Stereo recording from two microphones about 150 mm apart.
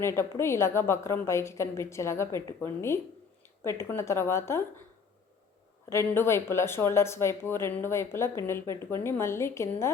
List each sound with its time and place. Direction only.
0.0 s speech: 15° left (ahead or behind)
5.9 s speech: 15° left (ahead or behind)